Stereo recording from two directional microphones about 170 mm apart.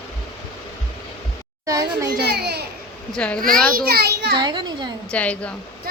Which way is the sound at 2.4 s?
75° right (ahead or behind).